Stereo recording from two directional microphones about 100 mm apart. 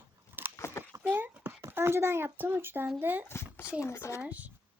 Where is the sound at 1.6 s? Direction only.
25° right (ahead or behind).